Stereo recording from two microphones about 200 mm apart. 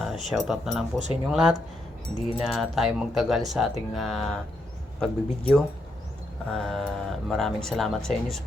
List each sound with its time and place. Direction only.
0.0 s speech: centre (ahead or behind)